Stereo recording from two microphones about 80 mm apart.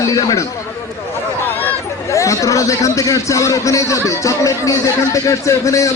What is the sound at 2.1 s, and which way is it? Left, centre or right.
A man's voice, left.